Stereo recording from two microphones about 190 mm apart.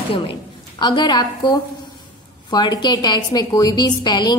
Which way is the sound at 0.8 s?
20° left (ahead or behind).